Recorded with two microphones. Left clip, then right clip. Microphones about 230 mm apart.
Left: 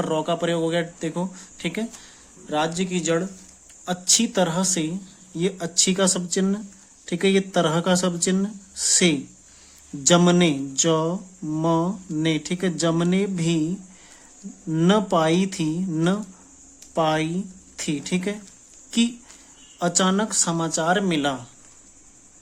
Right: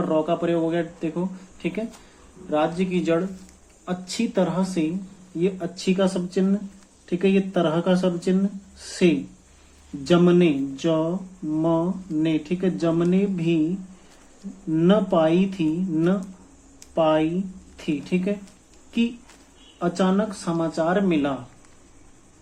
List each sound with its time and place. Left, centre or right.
0.1 s speech: left
2.5 s speech: left
14.7 s speech: left
16.9 s speech: left